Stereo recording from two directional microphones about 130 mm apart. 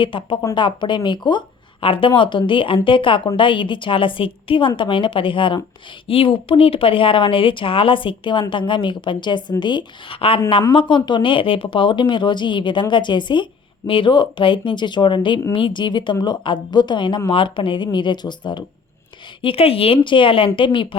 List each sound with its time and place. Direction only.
0.0 s speech: 40° left (ahead or behind)
19.4 s speech: 45° left (ahead or behind)